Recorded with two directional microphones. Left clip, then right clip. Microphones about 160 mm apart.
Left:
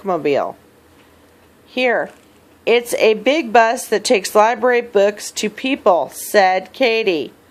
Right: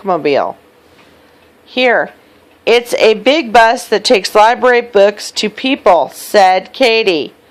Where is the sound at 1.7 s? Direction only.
20° right (ahead or behind).